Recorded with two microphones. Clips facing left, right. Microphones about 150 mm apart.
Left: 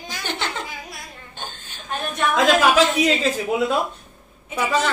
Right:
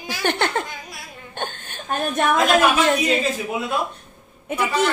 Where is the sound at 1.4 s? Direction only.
60° right (ahead or behind).